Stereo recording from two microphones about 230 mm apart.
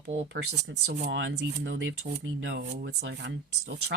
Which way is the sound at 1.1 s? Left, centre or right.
Right.